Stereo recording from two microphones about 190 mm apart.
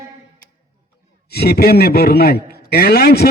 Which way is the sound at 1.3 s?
55° left (ahead or behind).